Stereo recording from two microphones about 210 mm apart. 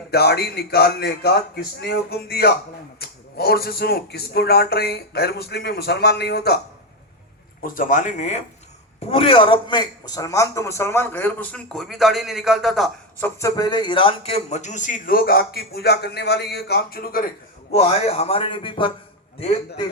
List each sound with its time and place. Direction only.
0.1 s speech: 50° left (ahead or behind)
7.6 s a man's voice: 40° left (ahead or behind)
17.7 s a man's voice: 30° left (ahead or behind)